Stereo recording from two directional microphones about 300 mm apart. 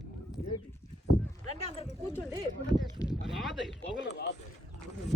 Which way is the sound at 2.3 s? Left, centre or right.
Centre.